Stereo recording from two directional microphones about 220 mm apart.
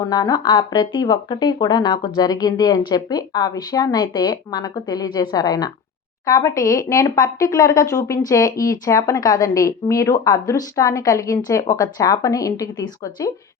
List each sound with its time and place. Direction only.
0.0 s speech: 15° left (ahead or behind)